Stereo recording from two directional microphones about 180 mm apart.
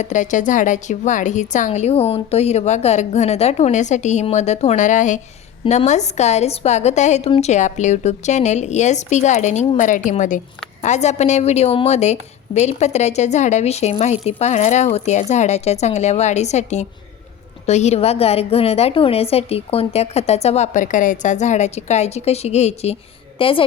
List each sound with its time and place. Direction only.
0.0 s a woman's voice: 45° left (ahead or behind)